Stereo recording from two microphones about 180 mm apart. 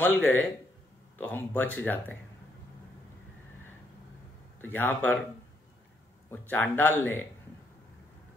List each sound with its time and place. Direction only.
0.0 s speech: 10° left (ahead or behind)
4.6 s speech: 10° left (ahead or behind)
6.3 s speech: 10° left (ahead or behind)